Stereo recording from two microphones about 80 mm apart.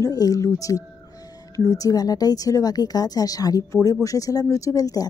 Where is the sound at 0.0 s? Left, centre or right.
Left.